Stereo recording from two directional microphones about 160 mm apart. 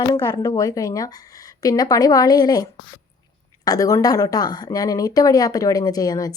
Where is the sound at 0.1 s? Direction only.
25° left (ahead or behind).